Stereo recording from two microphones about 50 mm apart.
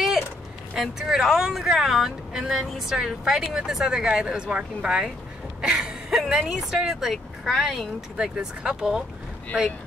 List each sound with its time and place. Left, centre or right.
0.7 s speech: centre
5.6 s a sound: centre
6.4 s speech: centre
6.9 s speech: centre
8.2 s speech: centre